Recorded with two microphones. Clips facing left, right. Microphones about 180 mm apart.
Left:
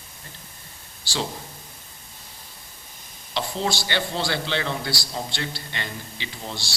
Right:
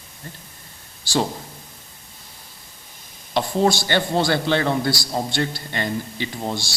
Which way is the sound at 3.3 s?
50° right (ahead or behind).